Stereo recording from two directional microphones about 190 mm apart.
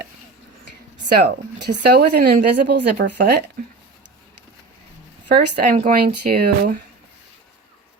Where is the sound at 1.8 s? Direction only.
60° right (ahead or behind).